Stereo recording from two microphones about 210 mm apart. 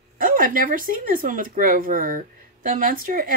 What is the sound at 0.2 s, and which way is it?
Speech, 40° right (ahead or behind).